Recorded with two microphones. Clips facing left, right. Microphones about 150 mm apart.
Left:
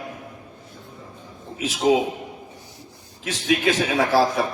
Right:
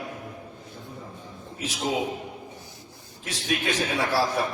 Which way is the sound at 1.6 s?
90° left.